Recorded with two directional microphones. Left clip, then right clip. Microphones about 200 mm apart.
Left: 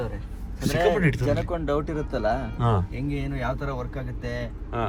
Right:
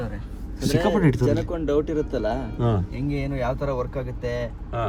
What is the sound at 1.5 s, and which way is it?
Speech, 25° left (ahead or behind).